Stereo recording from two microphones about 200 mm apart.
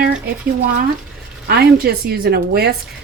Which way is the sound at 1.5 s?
50° right (ahead or behind).